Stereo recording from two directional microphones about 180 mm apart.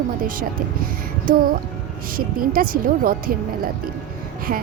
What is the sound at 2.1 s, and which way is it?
A woman's voice, 50° right (ahead or behind).